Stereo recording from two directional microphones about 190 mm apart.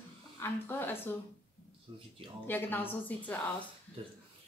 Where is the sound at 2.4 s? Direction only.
10° left (ahead or behind).